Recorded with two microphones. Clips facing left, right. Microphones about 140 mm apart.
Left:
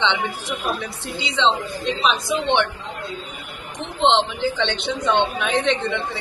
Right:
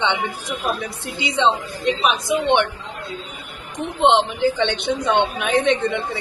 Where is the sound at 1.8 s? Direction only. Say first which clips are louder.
Right 2 dB; 55° right (ahead or behind).